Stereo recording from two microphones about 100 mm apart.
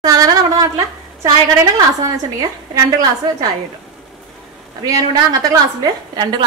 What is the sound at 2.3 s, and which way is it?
Speech, 40° right (ahead or behind).